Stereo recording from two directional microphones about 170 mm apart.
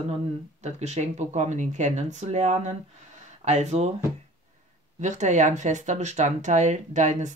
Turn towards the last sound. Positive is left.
turn(degrees=-45)  # may be behind; listen again after turning